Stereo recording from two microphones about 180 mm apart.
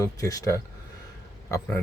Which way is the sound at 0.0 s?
20° left (ahead or behind).